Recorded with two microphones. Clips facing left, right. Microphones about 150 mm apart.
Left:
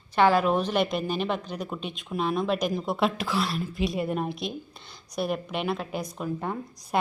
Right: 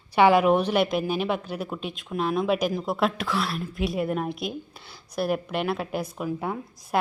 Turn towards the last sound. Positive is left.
turn(degrees=-5)  # may be behind; listen again after turning